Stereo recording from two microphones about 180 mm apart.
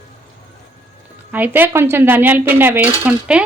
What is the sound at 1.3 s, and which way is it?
Speech, 10° right (ahead or behind).